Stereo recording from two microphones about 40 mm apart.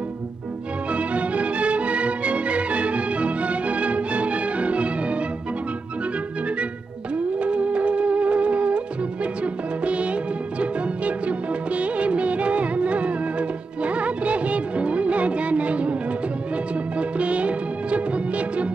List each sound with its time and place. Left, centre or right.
0.9 s music: right
7.3 s music: right
10.6 s music of bollywood: right
17.2 s music: right